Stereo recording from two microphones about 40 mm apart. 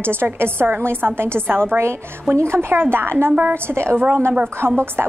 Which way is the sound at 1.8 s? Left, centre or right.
Right.